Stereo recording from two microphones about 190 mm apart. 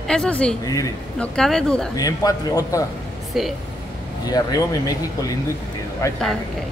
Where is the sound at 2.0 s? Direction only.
20° left (ahead or behind).